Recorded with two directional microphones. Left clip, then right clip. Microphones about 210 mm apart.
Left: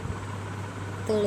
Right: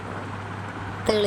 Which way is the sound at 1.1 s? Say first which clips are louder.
Right 4 dB; 30° right (ahead or behind).